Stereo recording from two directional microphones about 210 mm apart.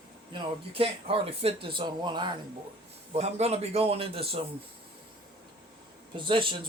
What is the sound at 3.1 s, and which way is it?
Speech, 30° right (ahead or behind).